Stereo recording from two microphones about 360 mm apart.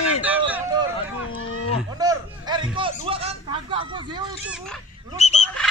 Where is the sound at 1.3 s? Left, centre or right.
Left.